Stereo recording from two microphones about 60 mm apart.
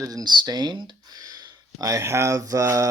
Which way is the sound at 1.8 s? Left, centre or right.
Right.